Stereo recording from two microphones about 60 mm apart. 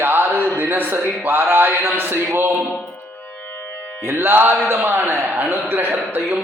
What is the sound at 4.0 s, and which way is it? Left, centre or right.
A man's voice, right.